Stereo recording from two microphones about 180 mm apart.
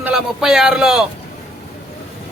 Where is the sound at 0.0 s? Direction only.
5° right (ahead or behind).